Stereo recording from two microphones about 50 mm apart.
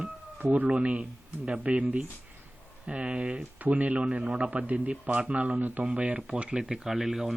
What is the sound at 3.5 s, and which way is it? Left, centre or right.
Speech, right.